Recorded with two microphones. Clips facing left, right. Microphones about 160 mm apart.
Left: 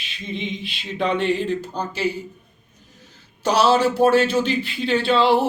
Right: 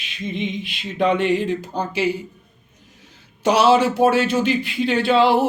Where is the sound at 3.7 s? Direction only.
5° right (ahead or behind).